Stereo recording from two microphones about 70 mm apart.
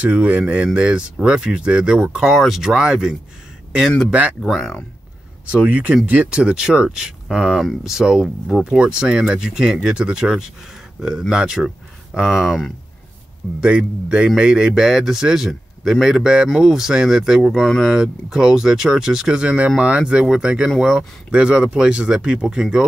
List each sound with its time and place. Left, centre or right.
0.0 s speech: right
4.4 s speech: centre
5.5 s speech: centre
13.6 s a man's voice: centre